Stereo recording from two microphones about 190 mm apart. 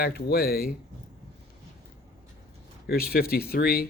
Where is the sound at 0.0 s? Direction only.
55° left (ahead or behind).